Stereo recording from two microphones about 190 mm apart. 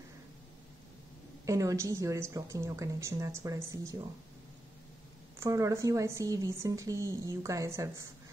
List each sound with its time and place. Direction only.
1.4 s a woman's voice: 15° right (ahead or behind)
5.4 s a woman's voice: 15° right (ahead or behind)